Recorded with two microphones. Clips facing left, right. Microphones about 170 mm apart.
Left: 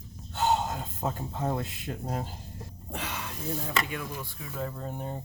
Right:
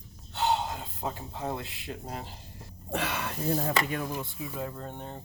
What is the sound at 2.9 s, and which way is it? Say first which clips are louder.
Speech: right 5 dB; 70° right (ahead or behind).